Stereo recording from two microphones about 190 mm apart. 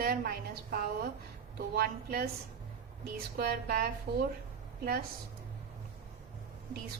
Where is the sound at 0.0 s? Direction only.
50° right (ahead or behind).